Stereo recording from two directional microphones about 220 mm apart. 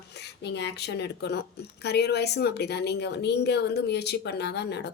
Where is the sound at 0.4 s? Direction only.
50° left (ahead or behind).